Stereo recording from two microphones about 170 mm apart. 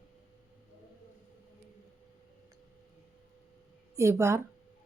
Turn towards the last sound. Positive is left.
turn(degrees=-15)  # may be behind; listen again after turning